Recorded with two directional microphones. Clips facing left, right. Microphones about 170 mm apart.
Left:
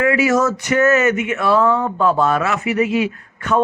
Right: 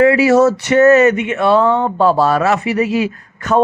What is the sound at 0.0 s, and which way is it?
A man's voice, 35° right (ahead or behind).